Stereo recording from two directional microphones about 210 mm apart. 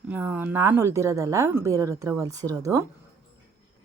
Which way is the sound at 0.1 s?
10° right (ahead or behind).